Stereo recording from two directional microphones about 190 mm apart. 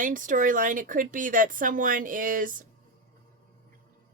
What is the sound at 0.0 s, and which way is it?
Speech, 45° right (ahead or behind).